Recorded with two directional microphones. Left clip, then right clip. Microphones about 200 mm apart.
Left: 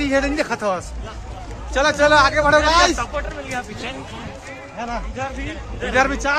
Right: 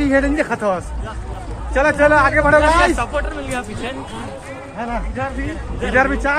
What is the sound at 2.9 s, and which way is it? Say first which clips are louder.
Speech: right 4 dB; 35° right (ahead or behind).